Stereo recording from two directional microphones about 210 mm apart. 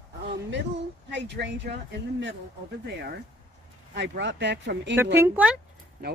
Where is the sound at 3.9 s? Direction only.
55° right (ahead or behind).